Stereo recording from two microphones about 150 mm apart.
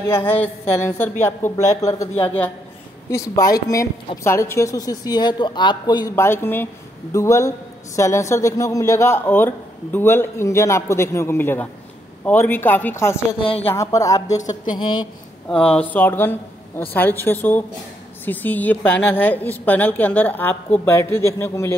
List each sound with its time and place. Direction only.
0.1 s a woman's voice: 15° left (ahead or behind)
2.2 s a woman's voice: 10° left (ahead or behind)
3.1 s a woman's voice: 20° left (ahead or behind)
13.5 s speech: 40° left (ahead or behind)
13.7 s a woman's voice: 20° left (ahead or behind)
15.7 s a woman's voice: 10° left (ahead or behind)